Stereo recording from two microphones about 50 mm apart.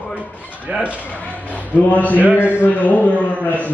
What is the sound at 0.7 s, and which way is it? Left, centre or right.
Speech, right.